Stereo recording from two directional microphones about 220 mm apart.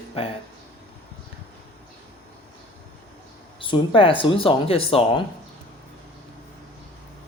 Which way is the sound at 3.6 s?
25° left (ahead or behind).